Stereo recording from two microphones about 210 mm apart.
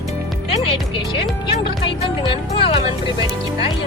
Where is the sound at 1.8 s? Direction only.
25° left (ahead or behind).